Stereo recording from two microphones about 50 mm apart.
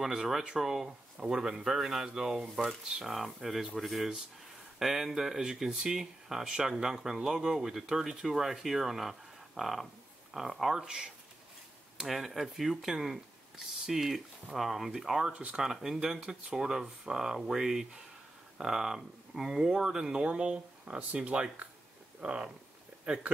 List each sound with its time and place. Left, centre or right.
0.0 s speech: centre
12.1 s speech: centre